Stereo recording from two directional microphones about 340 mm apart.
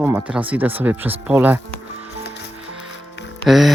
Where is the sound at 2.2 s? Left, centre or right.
Left.